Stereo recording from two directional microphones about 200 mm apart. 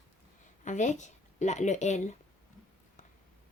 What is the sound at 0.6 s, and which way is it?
Speech, 40° left (ahead or behind).